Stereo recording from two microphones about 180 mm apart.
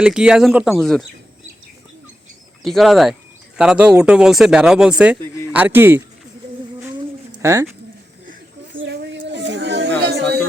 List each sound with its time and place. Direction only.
0.0 s speech: 5° right (ahead or behind)
2.6 s speech: centre (ahead or behind)
7.4 s speech: 15° right (ahead or behind)
8.8 s a sound: 75° right (ahead or behind)